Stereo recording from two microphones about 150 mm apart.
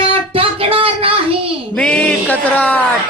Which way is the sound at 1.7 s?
10° left (ahead or behind).